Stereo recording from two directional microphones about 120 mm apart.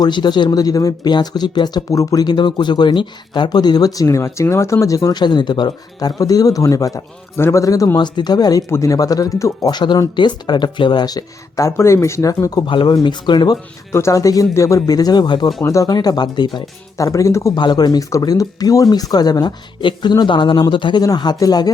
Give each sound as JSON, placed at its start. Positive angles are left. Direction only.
{"t": 0.0, "sound": "speech", "side_deg": 40}
{"t": 13.9, "sound": "speech", "side_deg": 25}
{"t": 17.1, "sound": "speech", "side_deg": 25}
{"t": 17.5, "sound": "speech", "side_deg": 40}